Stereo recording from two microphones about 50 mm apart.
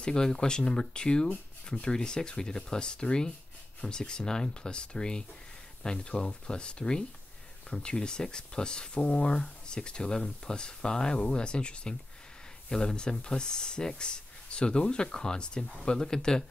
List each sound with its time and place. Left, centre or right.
0.0 s speech: centre